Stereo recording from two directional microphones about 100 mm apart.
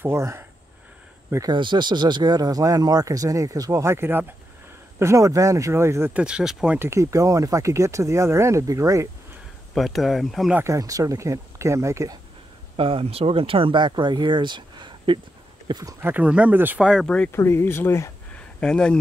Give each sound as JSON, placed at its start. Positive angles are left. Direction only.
{"t": 0.0, "sound": "speech", "side_deg": -25}
{"t": 1.5, "sound": "speech", "side_deg": -50}
{"t": 6.1, "sound": "speech", "side_deg": -10}
{"t": 6.8, "sound": "speech", "side_deg": -30}
{"t": 9.8, "sound": "speech", "side_deg": 0}
{"t": 10.6, "sound": "speech", "side_deg": -35}
{"t": 12.7, "sound": "speech", "side_deg": -65}
{"t": 15.7, "sound": "speech", "side_deg": -35}
{"t": 16.0, "sound": "speech", "side_deg": -15}
{"t": 16.8, "sound": "speech", "side_deg": 0}
{"t": 17.3, "sound": "speech", "side_deg": 25}
{"t": 18.6, "sound": "speech", "side_deg": 10}